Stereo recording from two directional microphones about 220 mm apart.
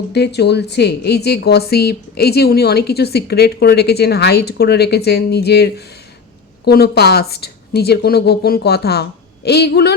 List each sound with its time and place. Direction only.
0.1 s a woman's voice: 50° left (ahead or behind)